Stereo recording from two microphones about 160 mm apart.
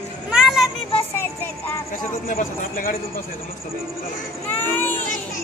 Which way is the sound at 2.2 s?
55° left (ahead or behind).